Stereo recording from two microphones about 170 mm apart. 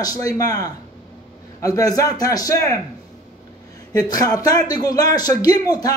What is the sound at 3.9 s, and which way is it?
Speech, 20° left (ahead or behind).